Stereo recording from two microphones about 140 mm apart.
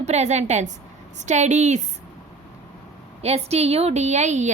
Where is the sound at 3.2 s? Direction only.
50° right (ahead or behind).